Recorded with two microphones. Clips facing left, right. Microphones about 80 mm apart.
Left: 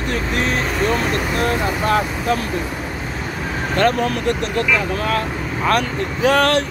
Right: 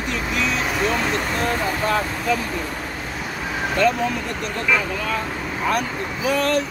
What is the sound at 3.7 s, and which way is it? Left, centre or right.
Speech, left.